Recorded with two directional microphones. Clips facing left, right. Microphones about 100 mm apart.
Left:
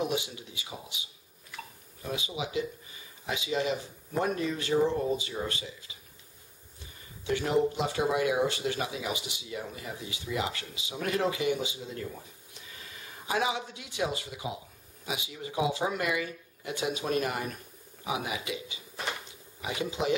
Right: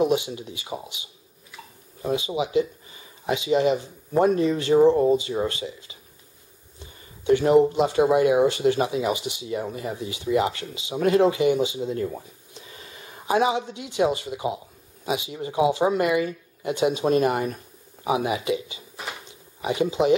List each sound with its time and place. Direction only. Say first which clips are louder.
0.0 s speech: right 10 dB; 30° right (ahead or behind)
2.1 s speech: right 10 dB; 30° right (ahead or behind)
7.2 s speech: right 10 dB; 30° right (ahead or behind)
13.3 s speech: right 8 dB; 30° right (ahead or behind)
19.6 s speech: right 9 dB; 30° right (ahead or behind)